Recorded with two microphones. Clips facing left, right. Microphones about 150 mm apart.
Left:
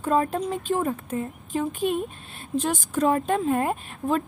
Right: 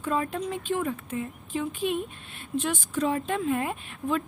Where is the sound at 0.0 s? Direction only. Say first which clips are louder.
Left 5 dB; 40° left (ahead or behind).